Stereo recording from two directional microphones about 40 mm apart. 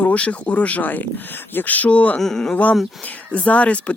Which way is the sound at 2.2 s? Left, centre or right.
Centre.